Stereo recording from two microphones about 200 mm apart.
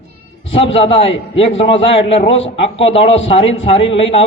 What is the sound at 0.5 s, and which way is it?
A man's voice, 30° left (ahead or behind).